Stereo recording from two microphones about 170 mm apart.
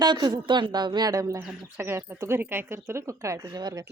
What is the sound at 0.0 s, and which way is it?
A woman's voice, 25° right (ahead or behind).